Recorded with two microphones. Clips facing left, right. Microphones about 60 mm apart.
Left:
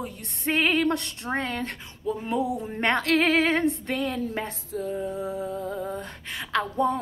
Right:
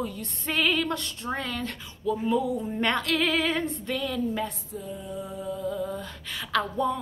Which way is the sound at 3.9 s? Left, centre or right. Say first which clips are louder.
Left 1 dB; left.